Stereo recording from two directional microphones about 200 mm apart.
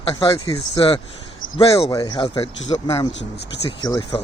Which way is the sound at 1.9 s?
20° left (ahead or behind).